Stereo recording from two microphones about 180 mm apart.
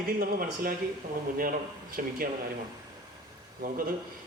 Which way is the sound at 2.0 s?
55° right (ahead or behind).